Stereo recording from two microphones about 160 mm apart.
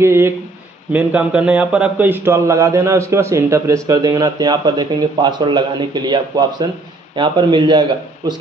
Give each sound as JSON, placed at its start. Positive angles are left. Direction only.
{"t": 0.0, "sound": "a man's voice", "side_deg": -15}